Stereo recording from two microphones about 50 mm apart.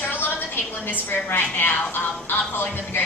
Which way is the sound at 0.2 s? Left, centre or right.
Left.